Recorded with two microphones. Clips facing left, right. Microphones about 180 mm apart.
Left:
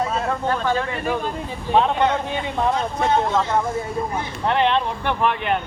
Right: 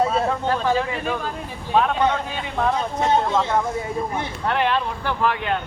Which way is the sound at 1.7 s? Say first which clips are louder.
Left 1 dB; 20° left (ahead or behind).